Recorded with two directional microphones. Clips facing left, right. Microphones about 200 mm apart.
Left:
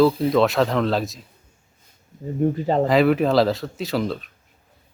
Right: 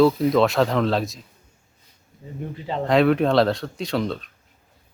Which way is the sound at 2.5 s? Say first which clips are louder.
Left 8 dB; 45° left (ahead or behind).